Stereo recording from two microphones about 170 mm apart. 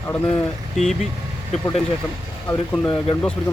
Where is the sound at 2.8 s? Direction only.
25° left (ahead or behind).